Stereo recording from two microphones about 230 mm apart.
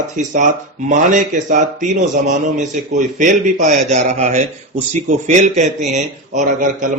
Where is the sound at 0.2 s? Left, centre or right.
Right.